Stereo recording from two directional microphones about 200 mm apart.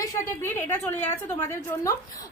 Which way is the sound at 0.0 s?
15° left (ahead or behind).